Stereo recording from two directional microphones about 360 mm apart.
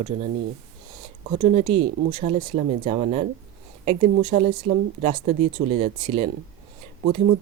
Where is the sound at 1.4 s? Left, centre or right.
Centre.